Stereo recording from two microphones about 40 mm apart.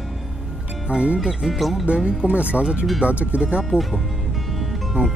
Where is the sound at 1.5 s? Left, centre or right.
Centre.